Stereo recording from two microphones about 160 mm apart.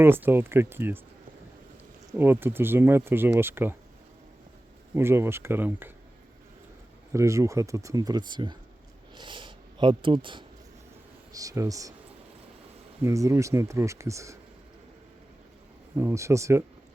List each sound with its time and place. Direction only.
0.0 s speech: 15° right (ahead or behind)
2.1 s speech: 15° right (ahead or behind)
4.9 s speech: 15° right (ahead or behind)
7.1 s speech: 20° right (ahead or behind)
11.3 s speech: 20° right (ahead or behind)
13.0 s speech: 20° right (ahead or behind)
16.0 s speech: 15° right (ahead or behind)